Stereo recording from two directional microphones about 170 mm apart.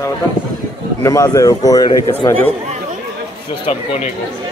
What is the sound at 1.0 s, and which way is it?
Speech, 20° left (ahead or behind).